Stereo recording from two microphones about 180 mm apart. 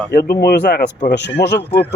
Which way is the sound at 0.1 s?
55° left (ahead or behind).